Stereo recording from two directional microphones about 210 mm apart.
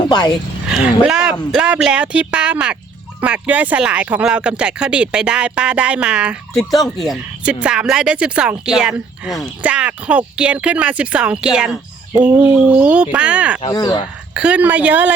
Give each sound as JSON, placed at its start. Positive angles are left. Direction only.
{"t": 0.0, "sound": "speech", "side_deg": 20}
{"t": 0.7, "sound": "speech", "side_deg": -5}
{"t": 13.7, "sound": "speech", "side_deg": 20}
{"t": 14.3, "sound": "a woman's voice", "side_deg": -5}